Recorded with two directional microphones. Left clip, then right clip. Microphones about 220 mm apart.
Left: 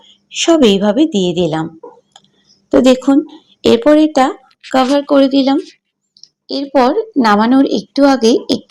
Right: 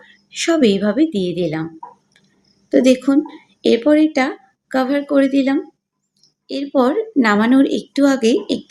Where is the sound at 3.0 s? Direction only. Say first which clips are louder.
Left 4 dB; 15° left (ahead or behind).